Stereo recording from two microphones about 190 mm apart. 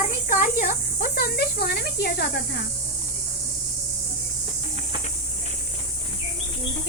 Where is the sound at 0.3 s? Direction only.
45° left (ahead or behind).